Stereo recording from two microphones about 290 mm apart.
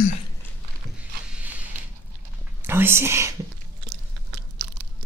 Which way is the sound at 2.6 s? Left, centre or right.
Centre.